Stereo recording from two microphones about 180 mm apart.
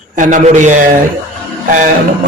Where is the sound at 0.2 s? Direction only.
45° right (ahead or behind).